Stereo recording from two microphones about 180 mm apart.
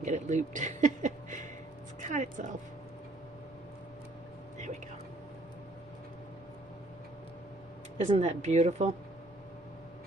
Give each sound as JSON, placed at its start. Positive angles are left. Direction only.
{"t": 0.0, "sound": "speech", "side_deg": -40}
{"t": 2.0, "sound": "a sound", "side_deg": -45}
{"t": 7.9, "sound": "speech", "side_deg": -35}